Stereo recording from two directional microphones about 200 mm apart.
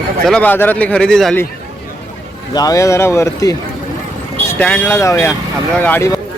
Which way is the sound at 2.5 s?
15° left (ahead or behind).